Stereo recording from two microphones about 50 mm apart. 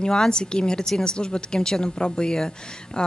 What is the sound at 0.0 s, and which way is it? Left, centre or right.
A man's voice, centre.